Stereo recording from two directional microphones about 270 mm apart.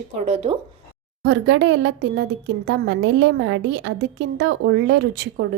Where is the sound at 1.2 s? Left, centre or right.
Right.